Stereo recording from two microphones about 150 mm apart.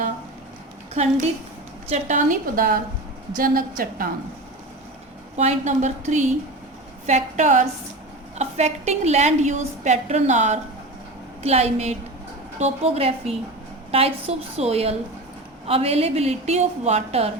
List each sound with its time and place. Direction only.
1.0 s a woman's voice: 50° right (ahead or behind); by 4.1 s 75° right (ahead or behind)
5.4 s a woman's voice: 50° right (ahead or behind)